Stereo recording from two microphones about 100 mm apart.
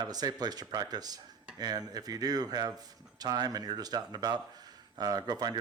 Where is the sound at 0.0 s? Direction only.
40° right (ahead or behind).